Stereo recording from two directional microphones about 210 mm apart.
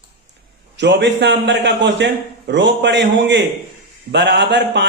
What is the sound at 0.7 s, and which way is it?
A man's voice, 55° right (ahead or behind).